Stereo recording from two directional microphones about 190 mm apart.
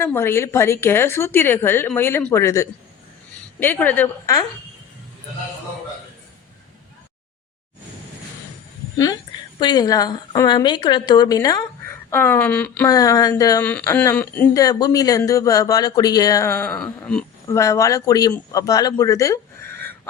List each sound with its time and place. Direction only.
0.0 s speech: 15° left (ahead or behind)
9.6 s a woman's voice: 20° left (ahead or behind)
12.9 s speech: 20° left (ahead or behind)
17.4 s speech: 15° left (ahead or behind)